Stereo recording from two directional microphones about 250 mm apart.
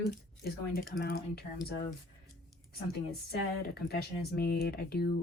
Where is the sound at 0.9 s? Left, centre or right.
Left.